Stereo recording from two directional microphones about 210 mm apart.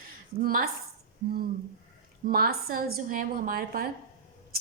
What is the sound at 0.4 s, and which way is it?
A woman's voice, 45° right (ahead or behind).